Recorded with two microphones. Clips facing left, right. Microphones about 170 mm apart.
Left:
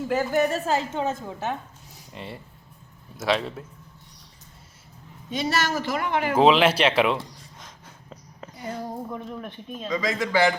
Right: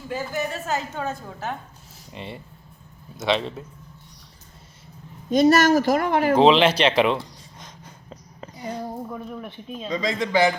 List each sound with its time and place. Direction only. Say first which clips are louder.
0.1 s a woman's voice: left 5 dB; 65° left (ahead or behind)
0.5 s a woman's voice: left 3 dB; 30° left (ahead or behind)
2.1 s speech: right 2 dB; centre (ahead or behind)
5.3 s speech: right 10 dB; 45° right (ahead or behind)
6.4 s speech: even; 5° left (ahead or behind)
7.6 s a sound: right 2 dB; centre (ahead or behind)
8.7 s speech: right 1 dB; centre (ahead or behind)
9.9 s speech: right 1 dB; 25° right (ahead or behind)